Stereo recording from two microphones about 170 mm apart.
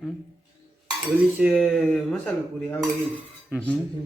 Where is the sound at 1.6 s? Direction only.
Centre (ahead or behind).